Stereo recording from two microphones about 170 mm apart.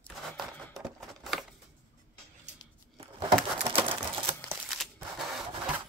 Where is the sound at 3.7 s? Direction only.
30° right (ahead or behind).